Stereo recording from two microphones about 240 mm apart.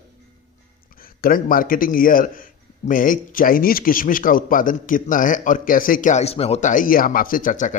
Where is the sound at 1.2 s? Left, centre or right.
Left.